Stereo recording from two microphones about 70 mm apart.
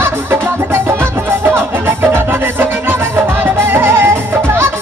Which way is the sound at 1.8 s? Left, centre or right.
Right.